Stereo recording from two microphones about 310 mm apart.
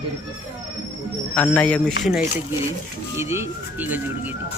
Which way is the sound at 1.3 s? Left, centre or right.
Centre.